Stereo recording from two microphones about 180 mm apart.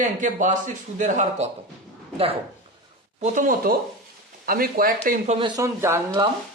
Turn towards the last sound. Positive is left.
turn(degrees=-15)  # may be behind; listen again after turning